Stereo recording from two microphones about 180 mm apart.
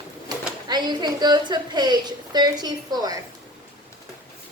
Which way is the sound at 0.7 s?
25° right (ahead or behind).